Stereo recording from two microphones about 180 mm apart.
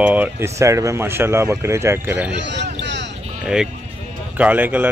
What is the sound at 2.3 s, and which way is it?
Speech, 75° right (ahead or behind).